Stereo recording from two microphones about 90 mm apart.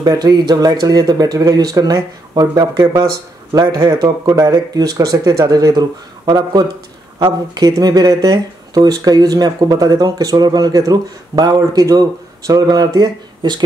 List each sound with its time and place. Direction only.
0.0 s speech: 50° right (ahead or behind)
7.2 s speech: 65° right (ahead or behind)
7.6 s speech: 45° right (ahead or behind)